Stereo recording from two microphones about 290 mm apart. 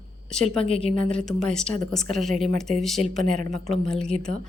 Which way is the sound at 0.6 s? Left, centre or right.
Centre.